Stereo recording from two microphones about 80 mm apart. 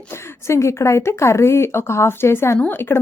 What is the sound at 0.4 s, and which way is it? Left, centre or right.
A woman's voice, left.